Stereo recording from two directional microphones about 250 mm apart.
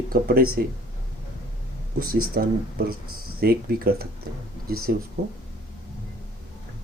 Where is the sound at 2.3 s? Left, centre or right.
Right.